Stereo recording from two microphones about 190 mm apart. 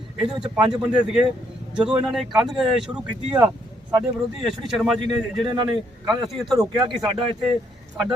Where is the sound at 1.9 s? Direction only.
5° right (ahead or behind).